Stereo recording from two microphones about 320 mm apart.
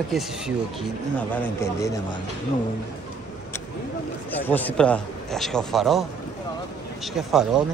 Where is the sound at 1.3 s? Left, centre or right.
Centre.